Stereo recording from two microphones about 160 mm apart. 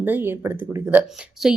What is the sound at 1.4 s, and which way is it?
Speech, centre (ahead or behind).